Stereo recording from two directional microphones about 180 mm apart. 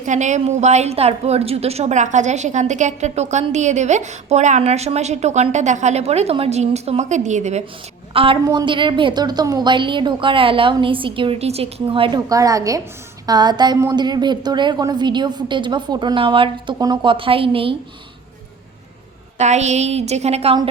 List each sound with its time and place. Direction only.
0.0 s a woman's voice: 40° right (ahead or behind)
8.1 s a woman's voice: 30° right (ahead or behind)
12.3 s a woman's voice: 20° right (ahead or behind)
19.4 s a woman's voice: 40° right (ahead or behind)